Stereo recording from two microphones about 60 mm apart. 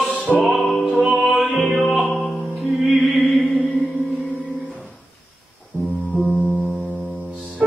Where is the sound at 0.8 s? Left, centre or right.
Centre.